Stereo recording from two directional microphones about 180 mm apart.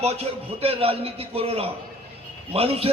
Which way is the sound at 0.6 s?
30° right (ahead or behind).